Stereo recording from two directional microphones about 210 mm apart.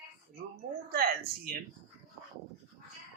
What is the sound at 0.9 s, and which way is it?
Speech, 45° right (ahead or behind).